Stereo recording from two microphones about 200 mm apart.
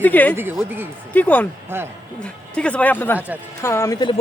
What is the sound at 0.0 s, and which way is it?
Speech, 10° left (ahead or behind).